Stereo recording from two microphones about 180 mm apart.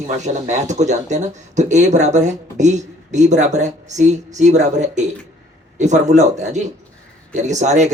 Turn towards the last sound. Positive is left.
turn(degrees=-40)  # may be behind; listen again after turning